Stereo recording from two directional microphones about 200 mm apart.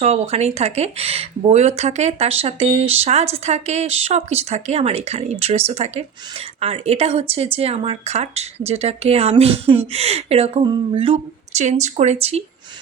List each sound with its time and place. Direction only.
0.0 s speech: 30° right (ahead or behind)